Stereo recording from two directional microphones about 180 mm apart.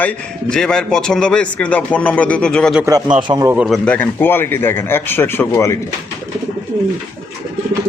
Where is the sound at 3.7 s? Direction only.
5° left (ahead or behind).